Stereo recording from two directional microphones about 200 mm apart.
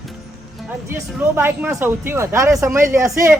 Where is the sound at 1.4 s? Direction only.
10° right (ahead or behind).